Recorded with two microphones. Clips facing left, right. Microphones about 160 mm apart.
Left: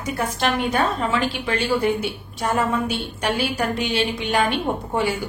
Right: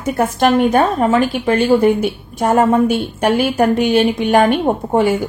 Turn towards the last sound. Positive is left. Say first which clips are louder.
# right 8 dB
turn(degrees=-50)  # may be behind; listen again after turning